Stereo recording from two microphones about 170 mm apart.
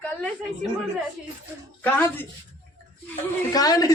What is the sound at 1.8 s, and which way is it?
Speech, 10° left (ahead or behind).